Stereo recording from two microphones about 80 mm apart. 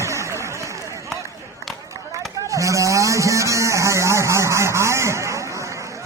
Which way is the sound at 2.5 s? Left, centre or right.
Right.